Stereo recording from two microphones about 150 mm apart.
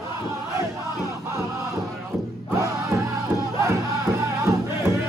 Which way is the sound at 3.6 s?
20° right (ahead or behind).